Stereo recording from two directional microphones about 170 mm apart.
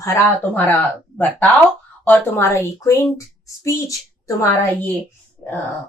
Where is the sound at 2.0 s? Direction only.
10° left (ahead or behind).